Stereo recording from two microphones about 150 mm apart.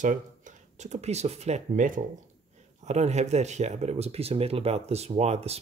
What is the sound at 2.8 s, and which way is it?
Speech, 50° right (ahead or behind).